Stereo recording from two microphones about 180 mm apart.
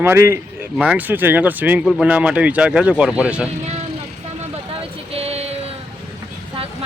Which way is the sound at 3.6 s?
35° right (ahead or behind).